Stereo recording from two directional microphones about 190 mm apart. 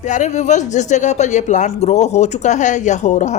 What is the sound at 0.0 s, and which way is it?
A woman's voice, 40° left (ahead or behind).